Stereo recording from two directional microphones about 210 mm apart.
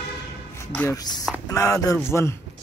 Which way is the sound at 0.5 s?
10° left (ahead or behind).